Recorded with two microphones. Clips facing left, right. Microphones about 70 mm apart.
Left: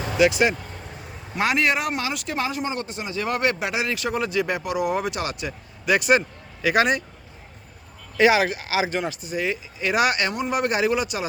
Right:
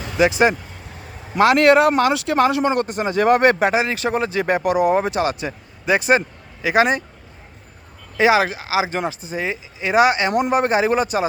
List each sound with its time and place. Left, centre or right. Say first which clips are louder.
0.2 s speech: right 3 dB; right
1.4 s a man's voice: right 9 dB; right
3.8 s speech: right 5 dB; right
8.2 s speech: right 2 dB; right